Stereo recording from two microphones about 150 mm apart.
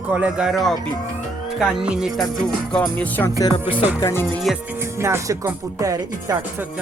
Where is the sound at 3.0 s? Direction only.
10° left (ahead or behind).